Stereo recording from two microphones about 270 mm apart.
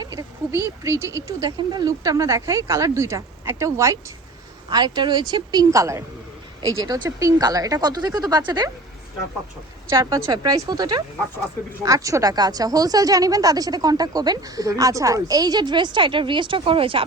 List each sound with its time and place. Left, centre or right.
0.0 s speech: centre
9.9 s speech: centre